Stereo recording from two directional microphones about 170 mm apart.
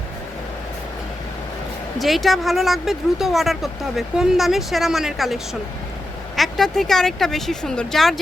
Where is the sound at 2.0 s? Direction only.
Centre (ahead or behind).